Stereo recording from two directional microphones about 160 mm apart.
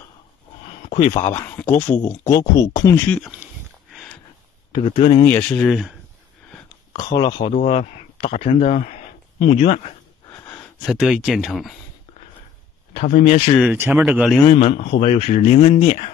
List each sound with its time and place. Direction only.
0.7 s a sound: 35° left (ahead or behind)
1.2 s speech: 15° left (ahead or behind)
3.4 s a sound: 10° right (ahead or behind)
3.9 s a sound: centre (ahead or behind)
4.9 s speech: 40° left (ahead or behind)
5.2 s speech: 10° left (ahead or behind)
6.9 s speech: 25° left (ahead or behind)
8.7 s speech: 50° left (ahead or behind)
10.9 s speech: centre (ahead or behind)
12.9 s speech: 45° left (ahead or behind)
13.7 s speech: 10° right (ahead or behind)
14.4 s speech: 40° left (ahead or behind)